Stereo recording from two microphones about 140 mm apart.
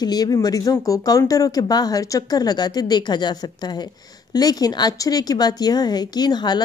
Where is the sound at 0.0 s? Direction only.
30° left (ahead or behind).